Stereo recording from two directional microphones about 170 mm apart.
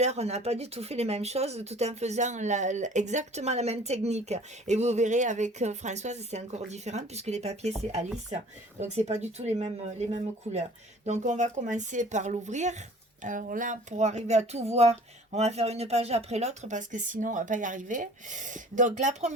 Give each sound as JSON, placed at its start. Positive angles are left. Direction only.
{"t": 0.0, "sound": "speech", "side_deg": -40}
{"t": 8.8, "sound": "speech", "side_deg": -40}